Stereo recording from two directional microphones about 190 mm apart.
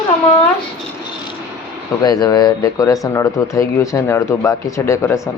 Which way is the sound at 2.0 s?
20° left (ahead or behind).